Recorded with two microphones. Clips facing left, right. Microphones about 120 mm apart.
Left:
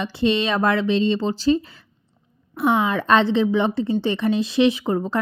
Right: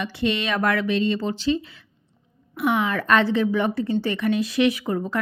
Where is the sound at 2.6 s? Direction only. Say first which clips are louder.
Left 3 dB; 25° left (ahead or behind).